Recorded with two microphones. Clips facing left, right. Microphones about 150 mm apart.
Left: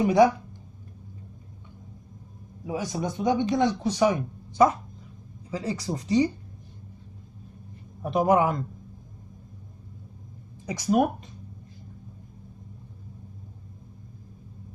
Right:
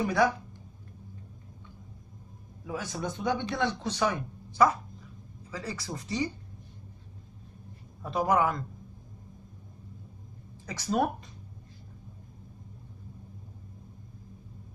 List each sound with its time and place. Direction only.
0.0 s speech: 20° left (ahead or behind)
2.6 s speech: 15° left (ahead or behind)
8.0 s speech: 20° left (ahead or behind)
10.7 s speech: 15° left (ahead or behind)